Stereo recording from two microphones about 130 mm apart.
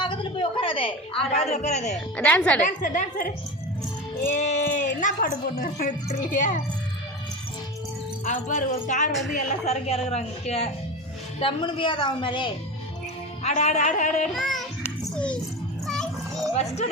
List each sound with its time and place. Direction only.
0.0 s a sound: 40° left (ahead or behind); by 2.0 s 60° left (ahead or behind)
2.1 s a woman's voice: 10° left (ahead or behind)
2.6 s a woman's voice: 85° left
4.4 s a woman's voice: 65° left (ahead or behind); by 6.6 s 80° left
8.2 s speech: 65° left (ahead or behind)
9.6 s a woman's voice: 55° left (ahead or behind)
11.3 s a woman's voice: 40° left (ahead or behind)
13.4 s a woman's voice: 60° left (ahead or behind)
14.3 s a child's voice: centre (ahead or behind)
15.9 s music: 5° left (ahead or behind)
16.6 s a woman's voice: 55° left (ahead or behind)